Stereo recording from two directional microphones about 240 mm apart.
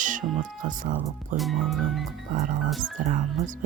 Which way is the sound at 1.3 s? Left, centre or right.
Centre.